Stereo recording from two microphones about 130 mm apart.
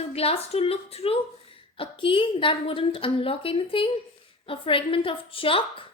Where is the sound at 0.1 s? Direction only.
50° left (ahead or behind).